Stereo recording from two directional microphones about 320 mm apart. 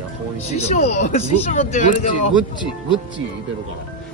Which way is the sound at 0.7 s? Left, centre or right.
Left.